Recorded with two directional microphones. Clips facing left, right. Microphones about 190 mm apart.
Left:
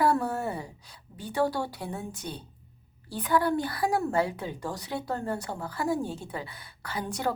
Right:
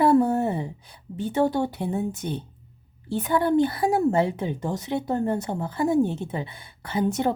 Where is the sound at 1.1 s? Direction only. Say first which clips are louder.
Right 5 dB; 25° right (ahead or behind).